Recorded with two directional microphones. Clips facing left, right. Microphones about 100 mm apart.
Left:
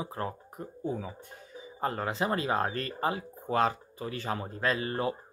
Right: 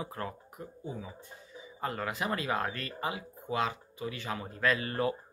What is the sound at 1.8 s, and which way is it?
Speech, 35° left (ahead or behind).